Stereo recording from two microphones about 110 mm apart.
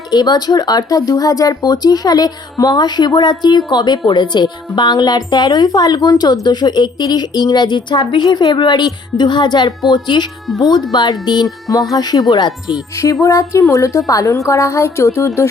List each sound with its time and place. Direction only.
0.1 s a woman's voice: 40° left (ahead or behind)